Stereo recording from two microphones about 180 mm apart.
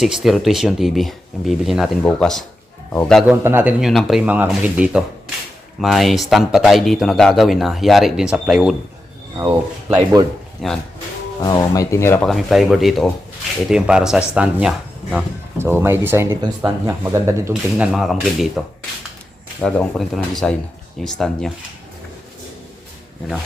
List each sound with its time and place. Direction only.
0.0 s speech: centre (ahead or behind)
3.4 s speech: 10° right (ahead or behind)
9.9 s a man's voice: 20° right (ahead or behind)
10.6 s speech: centre (ahead or behind)
11.4 s speech: 20° left (ahead or behind)
12.3 s speech: centre (ahead or behind)
17.5 s speech: centre (ahead or behind)
19.6 s speech: 5° left (ahead or behind)